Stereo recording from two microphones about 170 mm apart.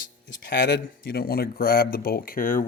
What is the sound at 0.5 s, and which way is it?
Speech, 65° left (ahead or behind).